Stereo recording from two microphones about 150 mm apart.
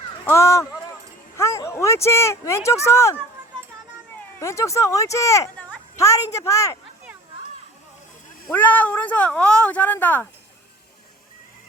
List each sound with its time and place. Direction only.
0.3 s speech: 20° left (ahead or behind)
4.4 s speech: 20° left (ahead or behind)
8.5 s speech: 10° left (ahead or behind)